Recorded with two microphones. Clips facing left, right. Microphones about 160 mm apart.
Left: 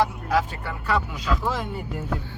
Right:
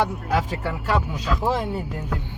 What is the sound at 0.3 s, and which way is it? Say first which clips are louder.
Speech: even; 80° right.